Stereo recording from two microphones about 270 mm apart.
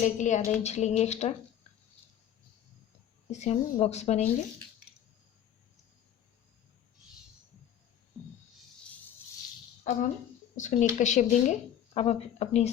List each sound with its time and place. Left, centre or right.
0.0 s speech: left
3.3 s speech: left
9.9 s speech: left